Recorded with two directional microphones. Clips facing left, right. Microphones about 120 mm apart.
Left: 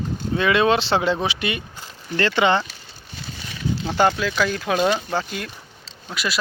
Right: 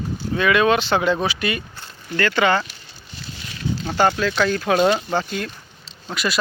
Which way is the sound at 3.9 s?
10° left (ahead or behind).